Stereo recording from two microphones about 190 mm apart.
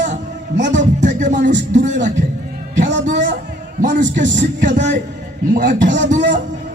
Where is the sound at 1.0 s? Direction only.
40° right (ahead or behind).